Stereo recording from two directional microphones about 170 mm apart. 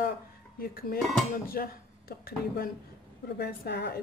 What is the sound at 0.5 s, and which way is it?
A woman's voice, 60° left (ahead or behind).